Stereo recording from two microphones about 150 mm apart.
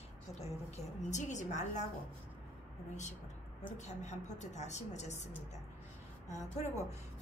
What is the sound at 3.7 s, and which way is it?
A woman's voice, 50° left (ahead or behind).